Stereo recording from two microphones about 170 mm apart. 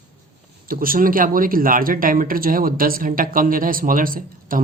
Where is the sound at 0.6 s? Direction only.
55° right (ahead or behind).